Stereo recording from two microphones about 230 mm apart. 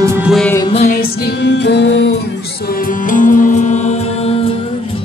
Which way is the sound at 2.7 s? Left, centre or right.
Left.